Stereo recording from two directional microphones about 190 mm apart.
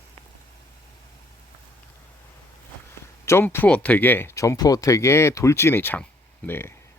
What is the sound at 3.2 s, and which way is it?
Speech, 15° left (ahead or behind).